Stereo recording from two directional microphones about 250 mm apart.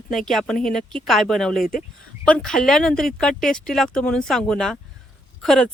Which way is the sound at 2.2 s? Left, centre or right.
Centre.